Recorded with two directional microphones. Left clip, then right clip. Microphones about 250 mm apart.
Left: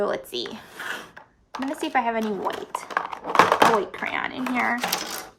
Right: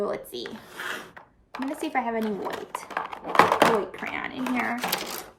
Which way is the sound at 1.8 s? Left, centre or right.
Centre.